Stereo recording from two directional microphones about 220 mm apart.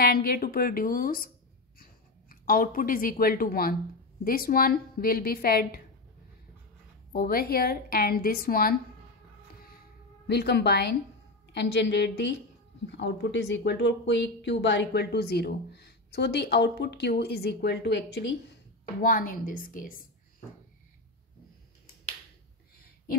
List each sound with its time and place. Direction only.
0.0 s a woman's voice: 45° left (ahead or behind)
7.1 s speech: 45° left (ahead or behind)
10.2 s a woman's voice: 50° left (ahead or behind)